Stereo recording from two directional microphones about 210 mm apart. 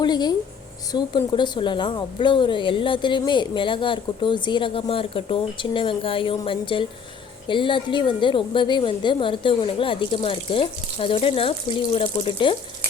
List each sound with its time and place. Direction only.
0.0 s a woman's voice: 20° left (ahead or behind)